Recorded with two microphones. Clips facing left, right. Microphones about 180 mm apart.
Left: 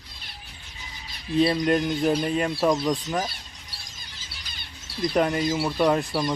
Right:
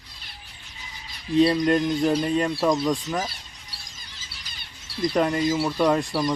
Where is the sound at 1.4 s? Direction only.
5° left (ahead or behind).